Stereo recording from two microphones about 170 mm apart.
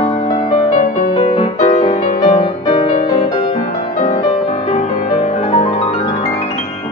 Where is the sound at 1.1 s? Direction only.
35° left (ahead or behind).